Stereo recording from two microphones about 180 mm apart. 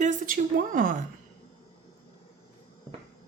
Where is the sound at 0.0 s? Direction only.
45° right (ahead or behind).